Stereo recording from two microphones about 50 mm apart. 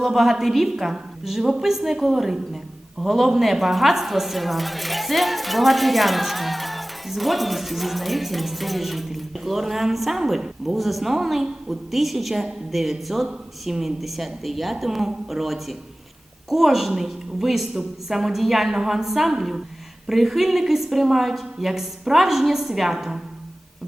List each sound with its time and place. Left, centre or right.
0.0 s a woman's voice: centre